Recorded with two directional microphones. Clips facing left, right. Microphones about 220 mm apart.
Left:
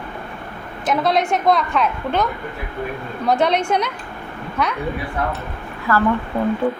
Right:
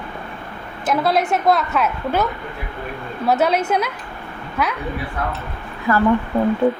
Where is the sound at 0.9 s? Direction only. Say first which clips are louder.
Even; 5° right (ahead or behind).